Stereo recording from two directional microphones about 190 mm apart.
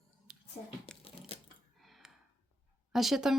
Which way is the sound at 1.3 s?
30° left (ahead or behind).